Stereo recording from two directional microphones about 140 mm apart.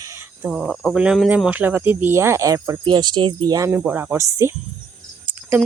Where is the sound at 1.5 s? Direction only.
10° right (ahead or behind); by 3.7 s 25° right (ahead or behind).